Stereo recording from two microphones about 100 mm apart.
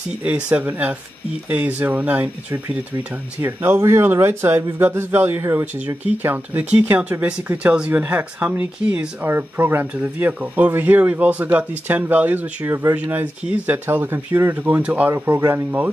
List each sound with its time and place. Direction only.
0.5 s speech: 15° right (ahead or behind)